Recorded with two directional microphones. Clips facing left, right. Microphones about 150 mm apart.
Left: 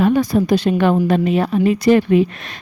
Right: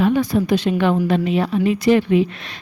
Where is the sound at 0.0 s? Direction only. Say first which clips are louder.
Left 2 dB; 45° left (ahead or behind).